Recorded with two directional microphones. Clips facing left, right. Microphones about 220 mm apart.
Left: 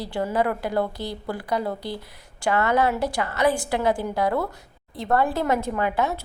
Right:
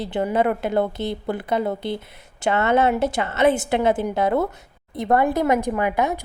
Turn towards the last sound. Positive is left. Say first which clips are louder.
# right 3 dB
turn(degrees=-15)  # may be behind; listen again after turning